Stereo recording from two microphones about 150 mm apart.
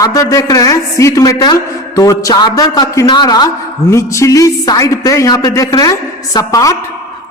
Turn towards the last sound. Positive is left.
turn(degrees=25)  # may be behind; listen again after turning